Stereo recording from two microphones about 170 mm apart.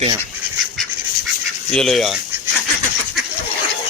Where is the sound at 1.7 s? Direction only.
5° left (ahead or behind).